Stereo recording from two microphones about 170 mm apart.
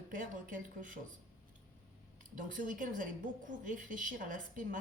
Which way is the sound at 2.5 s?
50° right (ahead or behind).